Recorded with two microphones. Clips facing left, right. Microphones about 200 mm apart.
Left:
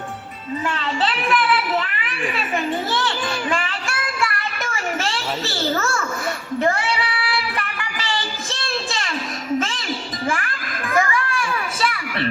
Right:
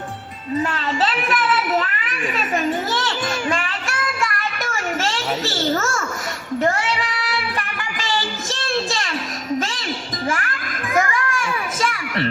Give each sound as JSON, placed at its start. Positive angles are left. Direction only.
{"t": 0.6, "sound": "a sound", "side_deg": -40}
{"t": 4.2, "sound": "a sound", "side_deg": -40}
{"t": 6.6, "sound": "speech", "side_deg": -40}
{"t": 8.0, "sound": "child singing", "side_deg": -40}
{"t": 9.6, "sound": "music", "side_deg": -40}
{"t": 11.3, "sound": "children playing", "side_deg": -45}